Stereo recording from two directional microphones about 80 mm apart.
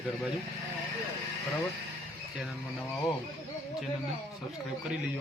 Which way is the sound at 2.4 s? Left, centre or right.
Centre.